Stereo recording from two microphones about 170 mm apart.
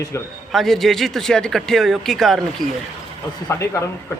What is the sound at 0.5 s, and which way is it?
Speech, centre (ahead or behind).